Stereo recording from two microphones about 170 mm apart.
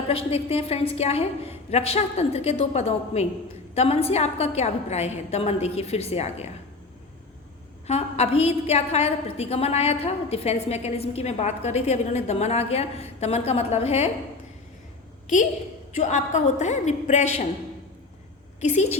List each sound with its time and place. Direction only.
0.1 s a woman's voice: 35° left (ahead or behind)
7.9 s a woman's voice: 40° left (ahead or behind)
16.0 s a woman's voice: 45° left (ahead or behind)
18.6 s a woman's voice: 40° left (ahead or behind)